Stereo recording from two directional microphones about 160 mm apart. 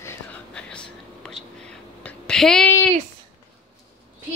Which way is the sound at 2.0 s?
5° left (ahead or behind).